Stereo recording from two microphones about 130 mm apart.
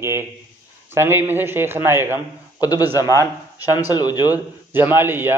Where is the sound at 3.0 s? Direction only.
25° left (ahead or behind).